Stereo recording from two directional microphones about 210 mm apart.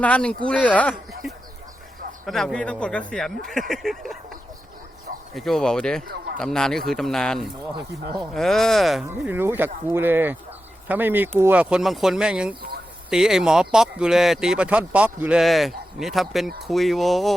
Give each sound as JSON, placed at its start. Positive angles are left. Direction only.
{"t": 0.0, "sound": "speech", "side_deg": 5}
{"t": 2.2, "sound": "speech", "side_deg": 0}
{"t": 6.1, "sound": "a sound", "side_deg": -45}
{"t": 6.4, "sound": "speech", "side_deg": 5}